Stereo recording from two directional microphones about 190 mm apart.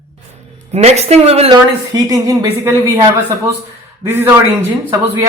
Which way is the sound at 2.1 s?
15° right (ahead or behind).